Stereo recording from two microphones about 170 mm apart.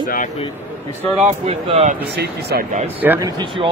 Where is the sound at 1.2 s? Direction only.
40° right (ahead or behind).